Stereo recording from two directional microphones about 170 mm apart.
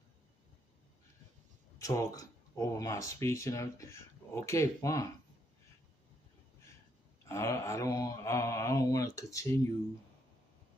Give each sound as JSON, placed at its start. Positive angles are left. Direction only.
{"t": 1.8, "sound": "speech", "side_deg": 20}
{"t": 7.2, "sound": "speech", "side_deg": 15}